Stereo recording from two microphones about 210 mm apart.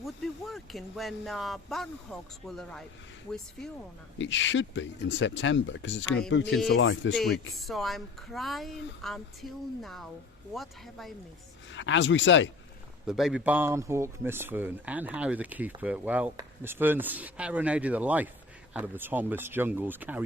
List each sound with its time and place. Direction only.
0.0 s speech: centre (ahead or behind)
4.2 s speech: 60° left (ahead or behind)
7.2 s speech: centre (ahead or behind)
11.7 s speech: 60° left (ahead or behind)
13.1 s speech: centre (ahead or behind)